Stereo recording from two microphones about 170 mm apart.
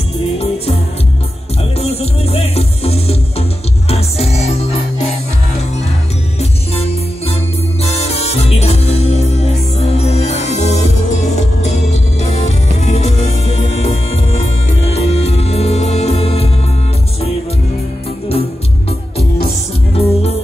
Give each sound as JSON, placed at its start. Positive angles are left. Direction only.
{"t": 1.6, "sound": "music", "side_deg": 35}
{"t": 6.7, "sound": "music", "side_deg": 35}
{"t": 19.9, "sound": "music", "side_deg": 35}